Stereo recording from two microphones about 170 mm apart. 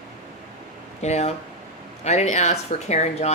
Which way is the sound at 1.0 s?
40° left (ahead or behind).